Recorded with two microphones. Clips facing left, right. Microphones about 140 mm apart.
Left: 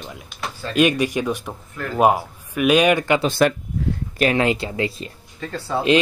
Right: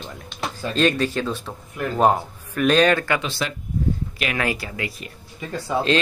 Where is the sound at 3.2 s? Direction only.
50° left (ahead or behind).